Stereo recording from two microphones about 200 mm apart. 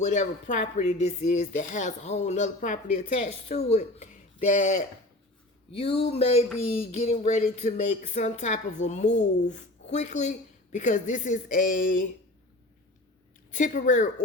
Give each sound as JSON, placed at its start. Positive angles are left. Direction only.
{"t": 0.0, "sound": "speech", "side_deg": 35}
{"t": 13.5, "sound": "speech", "side_deg": 40}